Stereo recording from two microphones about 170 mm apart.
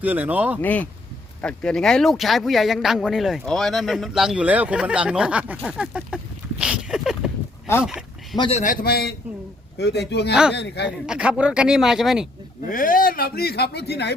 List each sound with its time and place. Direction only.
0.0 s speech: 10° right (ahead or behind)
0.6 s speech: 10° left (ahead or behind); by 6.1 s 5° right (ahead or behind)
6.6 s a sound: 5° right (ahead or behind)
8.4 s a man's voice: 35° left (ahead or behind)
8.6 s speech: 60° left (ahead or behind)
9.7 s speech: 80° left
11.0 s speech: 5° right (ahead or behind)
12.7 s speech: 55° left (ahead or behind); by 14.2 s 80° left